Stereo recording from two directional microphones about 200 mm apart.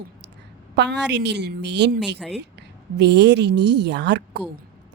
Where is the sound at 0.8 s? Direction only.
60° right (ahead or behind).